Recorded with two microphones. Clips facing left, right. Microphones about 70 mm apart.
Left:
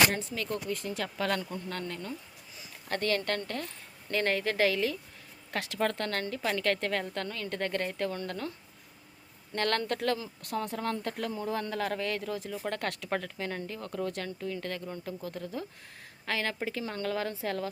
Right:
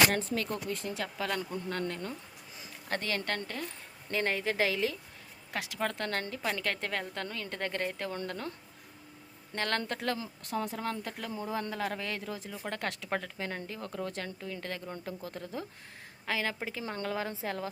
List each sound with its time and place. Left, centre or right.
0.2 s speech: right
1.8 s speech: right
2.9 s a woman's voice: right
5.5 s speech: centre; by 8.5 s right
9.6 s speech: centre
16.2 s a woman's voice: centre